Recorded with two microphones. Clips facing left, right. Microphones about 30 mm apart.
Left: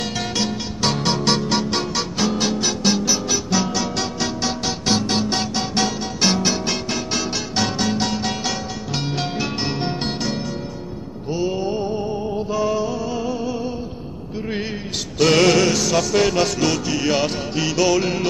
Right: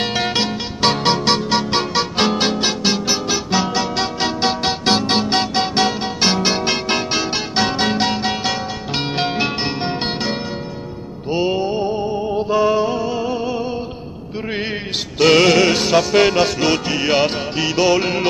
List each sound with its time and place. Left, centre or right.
0.0 s music: right
2.1 s music: right
7.1 s music: right
9.0 s music: right
9.7 s music: right
11.2 s music: right
11.6 s music: right
15.1 s music: right
15.6 s music: right